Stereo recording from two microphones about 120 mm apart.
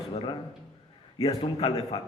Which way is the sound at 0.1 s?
40° left (ahead or behind).